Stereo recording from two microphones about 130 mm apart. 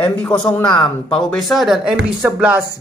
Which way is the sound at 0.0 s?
10° left (ahead or behind).